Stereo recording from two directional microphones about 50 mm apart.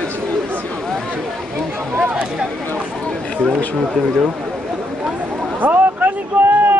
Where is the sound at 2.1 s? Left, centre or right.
Centre.